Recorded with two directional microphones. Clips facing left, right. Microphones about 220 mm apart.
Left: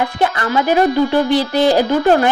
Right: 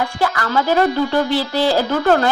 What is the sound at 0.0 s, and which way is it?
Speech, 20° left (ahead or behind).